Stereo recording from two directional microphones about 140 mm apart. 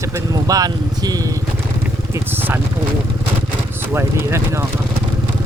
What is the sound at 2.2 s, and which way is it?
Speech, 15° right (ahead or behind).